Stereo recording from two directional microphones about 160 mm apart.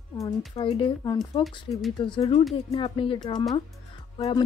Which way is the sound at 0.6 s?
30° left (ahead or behind).